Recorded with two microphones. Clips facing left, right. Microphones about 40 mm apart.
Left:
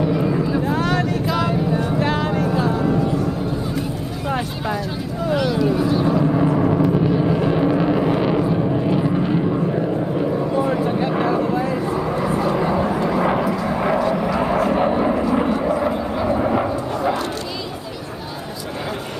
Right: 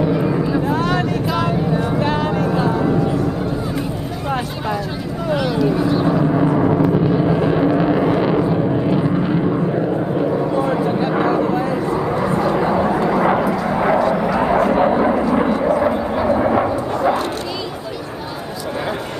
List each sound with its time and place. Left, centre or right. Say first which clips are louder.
0.0 s vehicle: right 2 dB; centre
0.9 s vehicle: right 1 dB; right
2.0 s a sound: right 2 dB; right
5.3 s vehicle: right 1 dB; centre
6.8 s a sound: right 2 dB; centre
11.6 s vehicle: right 2 dB; centre